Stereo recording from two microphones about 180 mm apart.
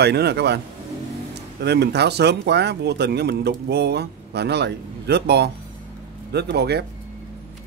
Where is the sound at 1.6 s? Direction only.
65° right (ahead or behind).